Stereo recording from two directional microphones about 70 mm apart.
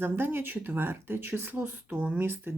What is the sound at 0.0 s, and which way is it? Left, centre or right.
Speech, right.